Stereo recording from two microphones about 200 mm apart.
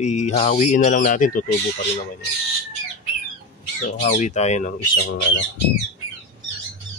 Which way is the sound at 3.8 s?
40° left (ahead or behind).